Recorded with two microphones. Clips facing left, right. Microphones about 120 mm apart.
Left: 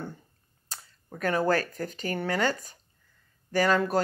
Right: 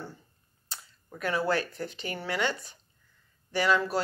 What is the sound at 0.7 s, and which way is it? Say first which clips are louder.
Speech: left 2 dB; 45° left (ahead or behind).